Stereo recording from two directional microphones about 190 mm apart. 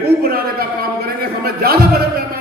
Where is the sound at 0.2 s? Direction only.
50° right (ahead or behind).